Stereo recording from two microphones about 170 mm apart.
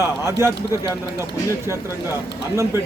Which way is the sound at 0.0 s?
15° right (ahead or behind).